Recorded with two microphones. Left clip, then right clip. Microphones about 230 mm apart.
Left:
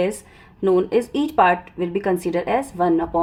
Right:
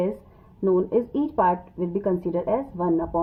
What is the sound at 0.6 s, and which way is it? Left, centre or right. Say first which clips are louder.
Speech: left 4 dB; left.